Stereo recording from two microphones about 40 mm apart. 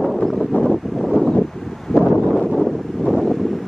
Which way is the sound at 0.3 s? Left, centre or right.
Centre.